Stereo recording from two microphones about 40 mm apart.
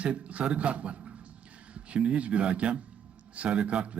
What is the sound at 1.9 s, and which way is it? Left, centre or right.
A man's voice, right.